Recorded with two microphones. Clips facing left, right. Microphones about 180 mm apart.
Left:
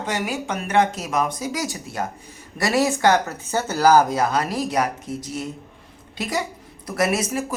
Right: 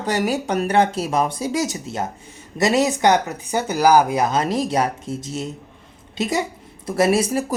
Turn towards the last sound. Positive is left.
turn(degrees=-30)  # may be behind; listen again after turning